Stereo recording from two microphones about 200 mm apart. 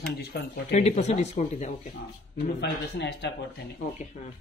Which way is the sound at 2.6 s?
60° left (ahead or behind).